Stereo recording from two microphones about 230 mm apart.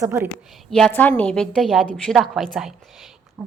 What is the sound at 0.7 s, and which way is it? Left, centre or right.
A woman's voice, centre.